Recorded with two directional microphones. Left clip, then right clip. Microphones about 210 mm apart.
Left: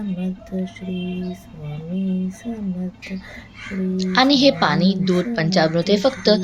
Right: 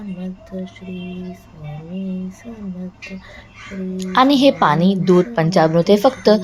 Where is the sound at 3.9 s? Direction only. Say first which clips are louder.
Right 2 dB; 15° right (ahead or behind).